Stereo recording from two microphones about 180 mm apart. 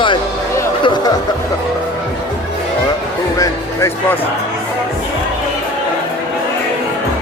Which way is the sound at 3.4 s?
15° left (ahead or behind).